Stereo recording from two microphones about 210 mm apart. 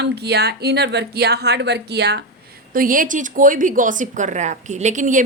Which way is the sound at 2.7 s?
40° right (ahead or behind).